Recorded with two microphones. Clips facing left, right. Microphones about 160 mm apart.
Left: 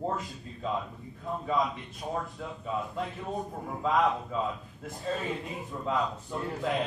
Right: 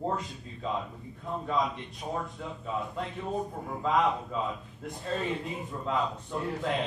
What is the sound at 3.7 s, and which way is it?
A man's voice, centre (ahead or behind).